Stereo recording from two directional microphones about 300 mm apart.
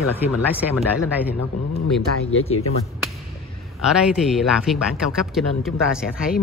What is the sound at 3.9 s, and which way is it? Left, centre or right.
Speech, centre.